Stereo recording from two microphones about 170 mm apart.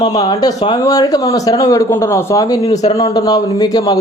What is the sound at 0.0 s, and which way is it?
Speech, 25° left (ahead or behind).